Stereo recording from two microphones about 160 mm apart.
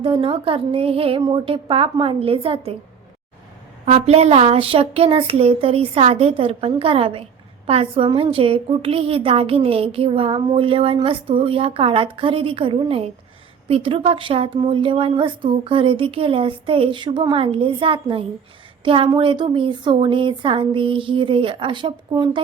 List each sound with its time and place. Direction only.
0.0 s a woman's voice: 35° right (ahead or behind)
3.8 s a woman's voice: 40° right (ahead or behind)